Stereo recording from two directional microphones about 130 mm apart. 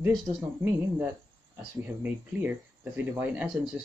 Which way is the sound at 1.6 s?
15° right (ahead or behind).